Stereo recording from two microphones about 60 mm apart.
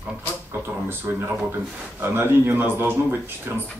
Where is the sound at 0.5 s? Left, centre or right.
Right.